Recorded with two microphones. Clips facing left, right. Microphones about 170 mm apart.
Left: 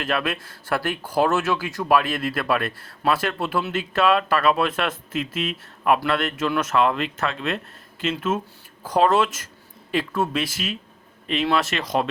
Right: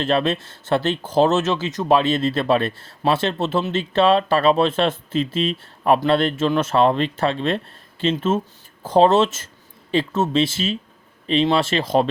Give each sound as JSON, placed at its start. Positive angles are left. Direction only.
{"t": 0.0, "sound": "speech", "side_deg": -25}